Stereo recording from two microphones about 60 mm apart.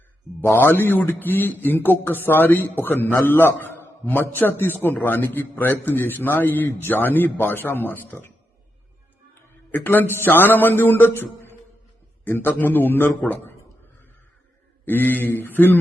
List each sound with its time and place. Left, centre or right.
0.5 s a man's voice: left
9.7 s a man's voice: left
14.8 s a man's voice: left